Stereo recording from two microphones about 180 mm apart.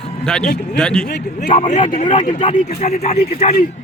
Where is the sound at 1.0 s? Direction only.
65° left (ahead or behind).